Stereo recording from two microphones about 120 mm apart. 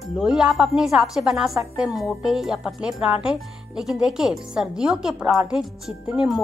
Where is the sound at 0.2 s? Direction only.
5° right (ahead or behind).